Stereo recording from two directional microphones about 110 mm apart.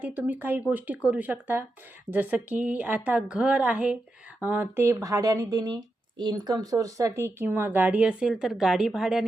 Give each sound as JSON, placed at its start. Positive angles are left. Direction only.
{"t": 0.0, "sound": "a woman's voice", "side_deg": -15}